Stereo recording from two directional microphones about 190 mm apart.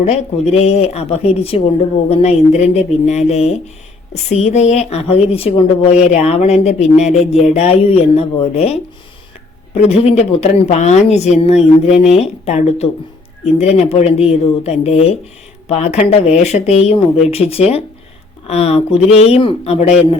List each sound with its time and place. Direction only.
0.0 s a woman's voice: 35° left (ahead or behind)
9.9 s a woman's voice: 35° left (ahead or behind)